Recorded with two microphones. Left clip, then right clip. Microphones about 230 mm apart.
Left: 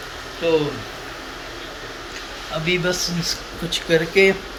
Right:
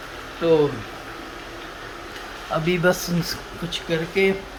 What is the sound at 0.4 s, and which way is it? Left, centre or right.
Speech, right.